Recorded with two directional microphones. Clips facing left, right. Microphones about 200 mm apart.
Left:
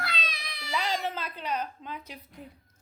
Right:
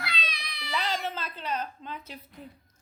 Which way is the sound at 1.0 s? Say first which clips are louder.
Left 1 dB; 15° left (ahead or behind).